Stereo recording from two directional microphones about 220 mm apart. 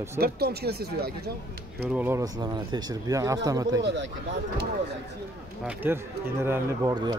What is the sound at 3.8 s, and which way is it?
Speech, 55° right (ahead or behind).